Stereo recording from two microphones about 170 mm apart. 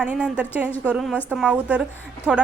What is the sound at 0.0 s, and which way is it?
A woman's voice, 5° right (ahead or behind).